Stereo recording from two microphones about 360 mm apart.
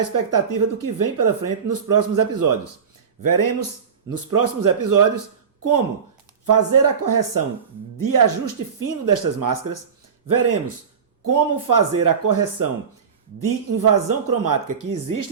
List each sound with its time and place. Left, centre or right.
0.3 s speech: right
6.4 s speech: right